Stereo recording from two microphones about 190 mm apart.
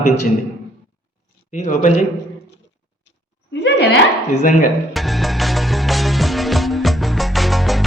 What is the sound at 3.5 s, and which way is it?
Speech, 65° left (ahead or behind).